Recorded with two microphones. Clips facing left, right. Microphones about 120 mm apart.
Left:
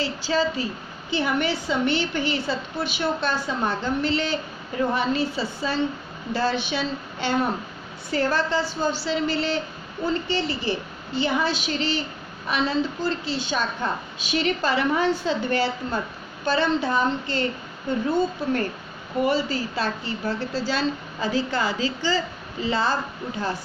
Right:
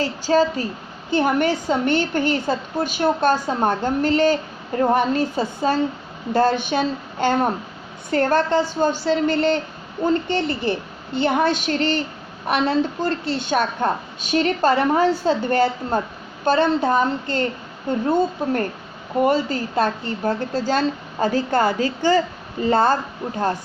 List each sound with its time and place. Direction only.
0.0 s a woman's voice: 45° right (ahead or behind)